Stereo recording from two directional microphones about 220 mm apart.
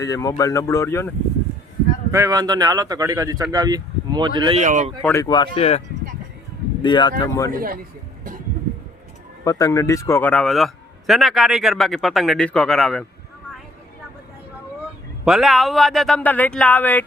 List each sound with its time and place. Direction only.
0.0 s speech: 15° left (ahead or behind)
2.1 s speech: 15° right (ahead or behind)
4.6 s speech: 35° right (ahead or behind)
5.0 s speech: 15° left (ahead or behind)
6.8 s speech: 20° left (ahead or behind)
7.5 s speech: 40° right (ahead or behind)
9.4 s a man's voice: 15° left (ahead or behind)
15.2 s a man's voice: centre (ahead or behind)